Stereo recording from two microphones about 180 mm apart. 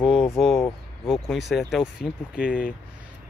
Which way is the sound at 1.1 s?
Centre (ahead or behind).